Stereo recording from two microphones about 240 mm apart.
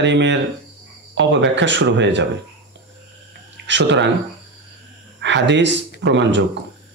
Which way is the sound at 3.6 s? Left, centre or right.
Right.